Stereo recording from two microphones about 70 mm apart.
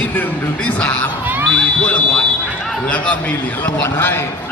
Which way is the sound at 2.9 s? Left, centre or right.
Centre.